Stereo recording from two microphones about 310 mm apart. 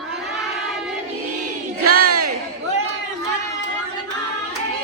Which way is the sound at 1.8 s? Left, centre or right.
Right.